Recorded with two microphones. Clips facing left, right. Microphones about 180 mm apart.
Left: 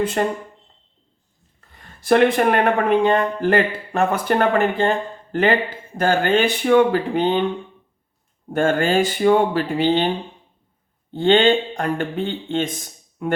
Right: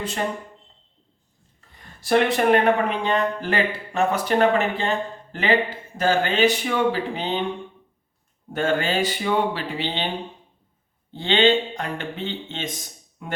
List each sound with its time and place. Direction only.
0.2 s speech: 50° left (ahead or behind)
2.0 s speech: 55° left (ahead or behind)
8.5 s speech: 50° left (ahead or behind)
11.1 s speech: 50° left (ahead or behind)